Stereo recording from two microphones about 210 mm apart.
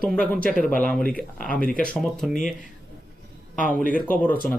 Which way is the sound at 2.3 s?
40° left (ahead or behind).